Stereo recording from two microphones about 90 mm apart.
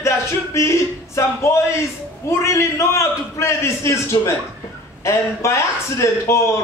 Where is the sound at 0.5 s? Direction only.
30° left (ahead or behind).